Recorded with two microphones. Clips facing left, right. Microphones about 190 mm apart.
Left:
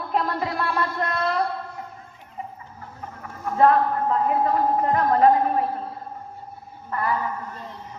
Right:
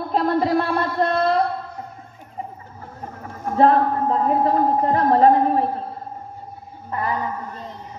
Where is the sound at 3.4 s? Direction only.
30° right (ahead or behind).